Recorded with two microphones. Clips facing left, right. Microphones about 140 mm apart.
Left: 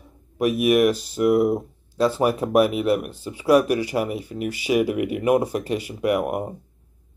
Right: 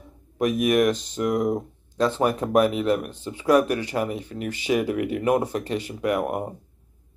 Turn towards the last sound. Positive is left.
turn(degrees=10)  # may be behind; listen again after turning